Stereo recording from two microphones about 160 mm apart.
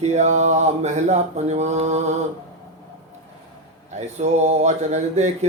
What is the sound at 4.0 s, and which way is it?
Speech, 45° right (ahead or behind).